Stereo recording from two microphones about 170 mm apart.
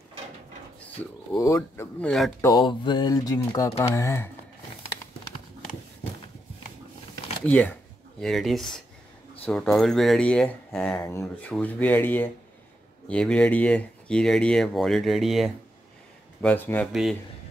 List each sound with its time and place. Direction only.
1.3 s speech: 20° left (ahead or behind)
2.4 s speech: 25° left (ahead or behind)
7.4 s speech: 10° left (ahead or behind)
16.9 s speech: centre (ahead or behind)